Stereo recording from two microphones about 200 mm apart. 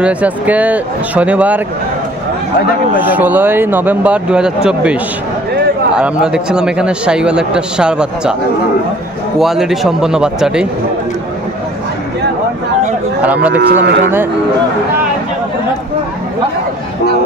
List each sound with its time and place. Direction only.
0.0 s speech: 5° right (ahead or behind)
3.1 s speech: 10° right (ahead or behind)
5.9 s a man's voice: 5° right (ahead or behind)
9.4 s a man's voice: centre (ahead or behind)
13.2 s speech: 5° right (ahead or behind)
13.6 s speech: 55° right (ahead or behind)